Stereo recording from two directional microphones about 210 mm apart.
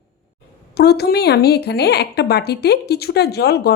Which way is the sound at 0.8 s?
50° left (ahead or behind).